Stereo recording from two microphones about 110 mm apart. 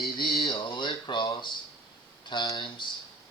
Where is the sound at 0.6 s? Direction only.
45° left (ahead or behind).